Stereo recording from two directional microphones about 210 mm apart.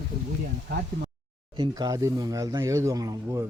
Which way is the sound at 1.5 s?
20° right (ahead or behind).